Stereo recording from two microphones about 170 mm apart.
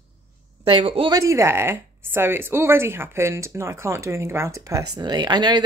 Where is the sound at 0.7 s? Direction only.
30° right (ahead or behind).